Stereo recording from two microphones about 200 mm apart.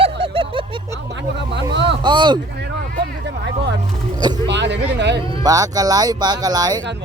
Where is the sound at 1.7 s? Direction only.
60° right (ahead or behind).